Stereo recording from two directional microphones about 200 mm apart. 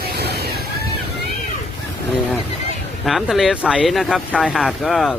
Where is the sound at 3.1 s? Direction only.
Centre (ahead or behind).